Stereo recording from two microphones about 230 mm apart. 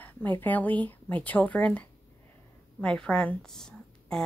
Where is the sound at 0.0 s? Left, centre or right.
Centre.